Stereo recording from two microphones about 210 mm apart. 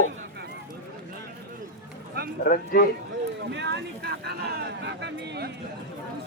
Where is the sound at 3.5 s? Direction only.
55° right (ahead or behind).